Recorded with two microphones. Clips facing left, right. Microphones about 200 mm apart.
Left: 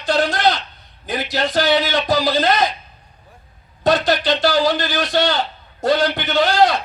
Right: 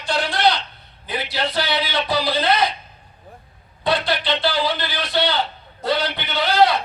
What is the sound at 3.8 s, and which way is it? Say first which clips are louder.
A man's voice: left 5 dB; 45° left (ahead or behind).